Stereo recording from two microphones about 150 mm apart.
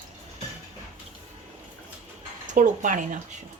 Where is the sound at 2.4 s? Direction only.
55° right (ahead or behind).